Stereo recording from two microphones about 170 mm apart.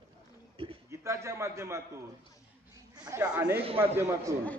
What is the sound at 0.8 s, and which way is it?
Speech, 15° right (ahead or behind).